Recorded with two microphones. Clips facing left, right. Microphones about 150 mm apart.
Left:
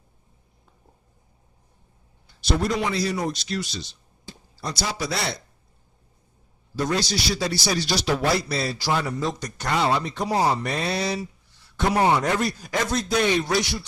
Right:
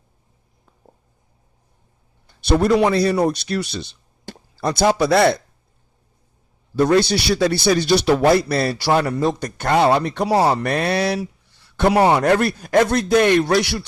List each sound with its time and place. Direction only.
2.2 s a man's voice: 60° right (ahead or behind)
6.7 s speech: 60° right (ahead or behind)